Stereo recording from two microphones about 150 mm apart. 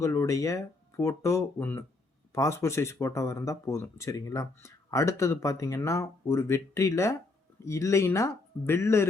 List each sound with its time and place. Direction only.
0.0 s speech: 20° left (ahead or behind)